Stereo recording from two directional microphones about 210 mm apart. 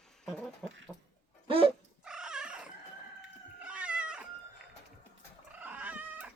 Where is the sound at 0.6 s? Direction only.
5° left (ahead or behind).